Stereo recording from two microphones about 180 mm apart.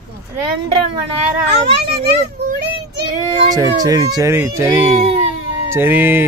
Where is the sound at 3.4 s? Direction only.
20° right (ahead or behind).